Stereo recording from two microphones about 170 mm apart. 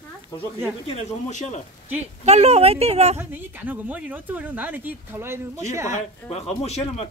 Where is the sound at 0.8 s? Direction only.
40° left (ahead or behind).